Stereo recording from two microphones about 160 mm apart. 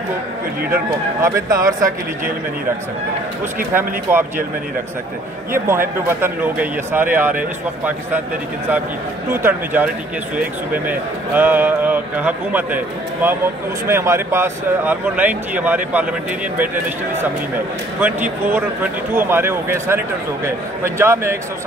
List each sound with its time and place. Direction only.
1.2 s speech: 20° right (ahead or behind)
3.7 s speech: 15° right (ahead or behind)
5.5 s speech: 15° right (ahead or behind)
9.3 s speech: 15° right (ahead or behind)